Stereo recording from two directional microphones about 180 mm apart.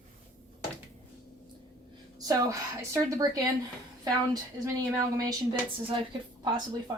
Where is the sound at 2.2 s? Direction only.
20° right (ahead or behind).